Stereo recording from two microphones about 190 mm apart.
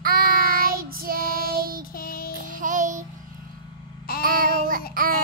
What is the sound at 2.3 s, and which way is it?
Music, 45° right (ahead or behind).